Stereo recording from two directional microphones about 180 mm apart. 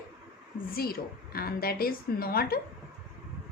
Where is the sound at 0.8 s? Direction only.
55° left (ahead or behind).